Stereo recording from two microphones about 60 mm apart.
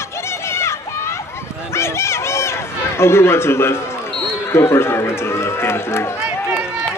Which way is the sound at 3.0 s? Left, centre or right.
Left.